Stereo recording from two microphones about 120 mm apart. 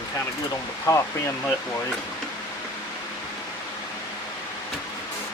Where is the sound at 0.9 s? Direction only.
25° left (ahead or behind).